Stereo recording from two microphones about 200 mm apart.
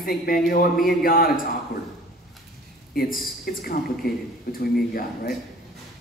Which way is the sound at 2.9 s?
50° left (ahead or behind).